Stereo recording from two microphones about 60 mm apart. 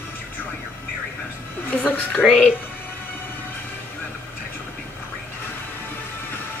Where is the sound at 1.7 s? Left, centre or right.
Left.